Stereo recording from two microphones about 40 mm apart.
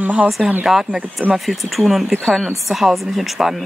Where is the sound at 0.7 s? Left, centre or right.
Centre.